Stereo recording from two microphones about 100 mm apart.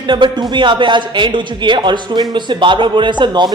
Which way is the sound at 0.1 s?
50° right (ahead or behind).